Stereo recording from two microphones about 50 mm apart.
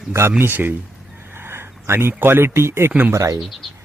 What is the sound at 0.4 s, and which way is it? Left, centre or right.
Speech, right.